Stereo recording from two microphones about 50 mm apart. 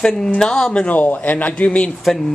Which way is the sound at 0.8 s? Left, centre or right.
Left.